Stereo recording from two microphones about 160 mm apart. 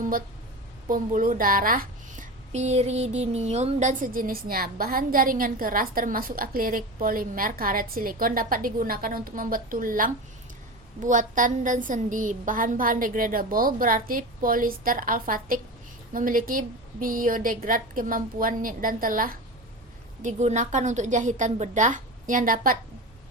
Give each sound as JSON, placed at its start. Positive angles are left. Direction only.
{"t": 0.9, "sound": "speech", "side_deg": -60}
{"t": 20.2, "sound": "a woman's voice", "side_deg": -50}